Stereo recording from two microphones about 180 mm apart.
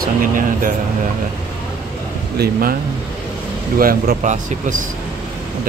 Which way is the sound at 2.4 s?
55° right (ahead or behind).